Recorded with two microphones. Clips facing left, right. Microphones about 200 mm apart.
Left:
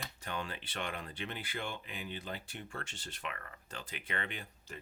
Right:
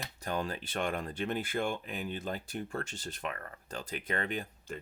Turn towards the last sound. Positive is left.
turn(degrees=-45)  # may be behind; listen again after turning